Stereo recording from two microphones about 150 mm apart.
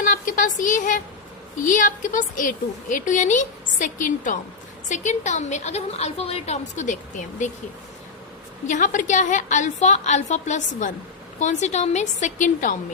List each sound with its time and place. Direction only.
0.0 s a woman's voice: 70° left (ahead or behind)
8.6 s a woman's voice: 55° left (ahead or behind)